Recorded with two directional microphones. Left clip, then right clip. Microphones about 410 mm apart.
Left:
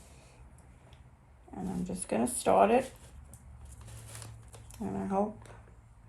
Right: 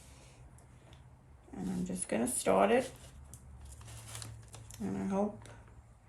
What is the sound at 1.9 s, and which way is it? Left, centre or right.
Speech, centre.